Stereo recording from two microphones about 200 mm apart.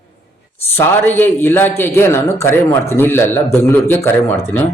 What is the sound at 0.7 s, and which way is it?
A man's voice, 10° left (ahead or behind).